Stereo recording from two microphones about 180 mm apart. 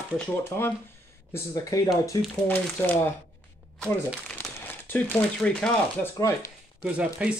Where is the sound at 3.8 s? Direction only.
5° left (ahead or behind).